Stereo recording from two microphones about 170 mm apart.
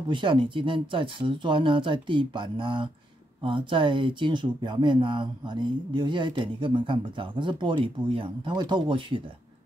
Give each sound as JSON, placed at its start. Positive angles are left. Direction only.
{"t": 0.1, "sound": "speech", "side_deg": -30}